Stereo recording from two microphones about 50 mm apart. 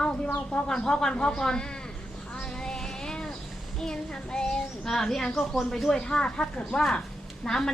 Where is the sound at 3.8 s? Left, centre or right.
Centre.